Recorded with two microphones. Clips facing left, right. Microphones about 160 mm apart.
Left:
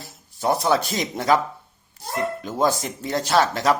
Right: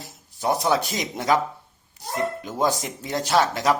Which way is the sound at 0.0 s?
15° right (ahead or behind).